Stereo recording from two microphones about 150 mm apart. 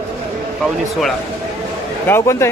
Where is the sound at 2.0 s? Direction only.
15° left (ahead or behind).